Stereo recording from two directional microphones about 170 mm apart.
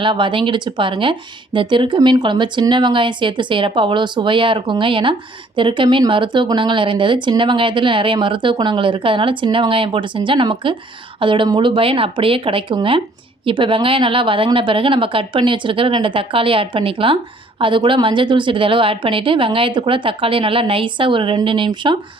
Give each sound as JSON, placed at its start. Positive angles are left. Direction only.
{"t": 0.0, "sound": "a woman's voice", "side_deg": -30}